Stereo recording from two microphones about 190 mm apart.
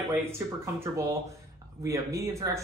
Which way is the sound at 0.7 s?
15° right (ahead or behind).